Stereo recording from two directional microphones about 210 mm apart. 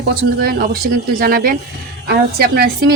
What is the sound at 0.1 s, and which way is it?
A woman's voice, 45° right (ahead or behind).